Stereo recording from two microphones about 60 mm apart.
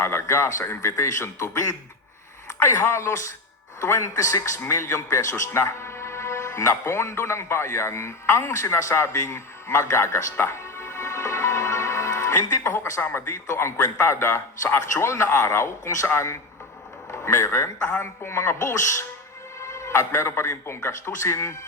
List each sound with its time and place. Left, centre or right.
0.0 s a man's voice: left
5.5 s a man's voice: left
10.4 s music: left
13.0 s a man's voice: left